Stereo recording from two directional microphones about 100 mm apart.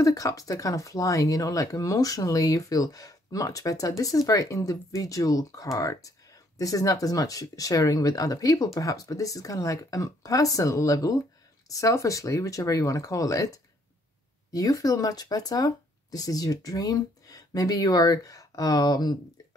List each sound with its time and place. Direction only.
0.0 s speech: 35° left (ahead or behind)